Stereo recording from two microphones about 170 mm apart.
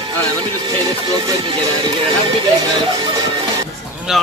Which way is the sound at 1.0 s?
25° right (ahead or behind).